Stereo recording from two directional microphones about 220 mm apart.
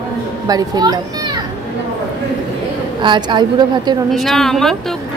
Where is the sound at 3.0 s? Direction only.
20° right (ahead or behind).